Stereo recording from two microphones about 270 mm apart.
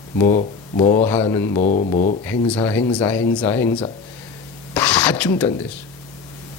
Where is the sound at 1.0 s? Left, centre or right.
Centre.